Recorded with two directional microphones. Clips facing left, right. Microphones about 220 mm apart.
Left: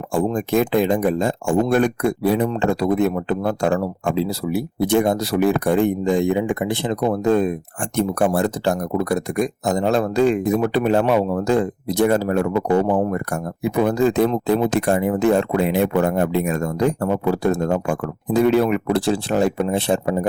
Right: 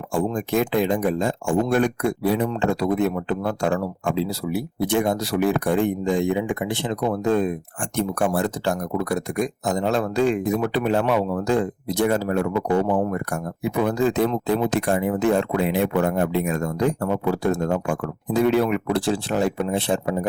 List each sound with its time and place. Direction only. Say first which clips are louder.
0.1 s speech: left 3 dB; 40° left (ahead or behind)